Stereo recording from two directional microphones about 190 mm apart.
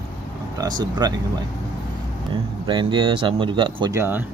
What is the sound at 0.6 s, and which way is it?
Speech, 20° right (ahead or behind).